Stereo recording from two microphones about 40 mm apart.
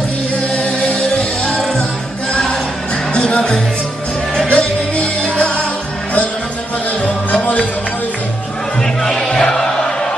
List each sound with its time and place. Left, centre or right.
0.6 s music: left
3.1 s music: left
7.3 s music: left
8.8 s music: centre